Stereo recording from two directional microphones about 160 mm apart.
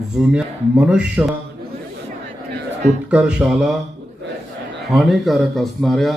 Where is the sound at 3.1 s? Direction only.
5° right (ahead or behind).